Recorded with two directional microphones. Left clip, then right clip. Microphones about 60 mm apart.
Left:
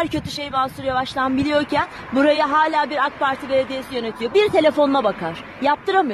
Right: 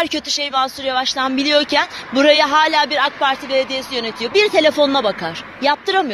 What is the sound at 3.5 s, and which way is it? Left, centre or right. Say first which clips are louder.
Speech: right 2 dB; left.